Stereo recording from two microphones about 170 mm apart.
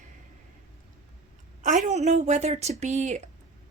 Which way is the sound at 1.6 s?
45° right (ahead or behind).